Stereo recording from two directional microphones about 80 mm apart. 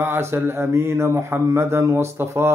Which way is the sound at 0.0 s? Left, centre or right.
Right.